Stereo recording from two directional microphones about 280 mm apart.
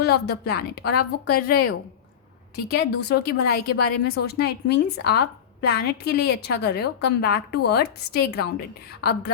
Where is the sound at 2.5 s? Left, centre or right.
Left.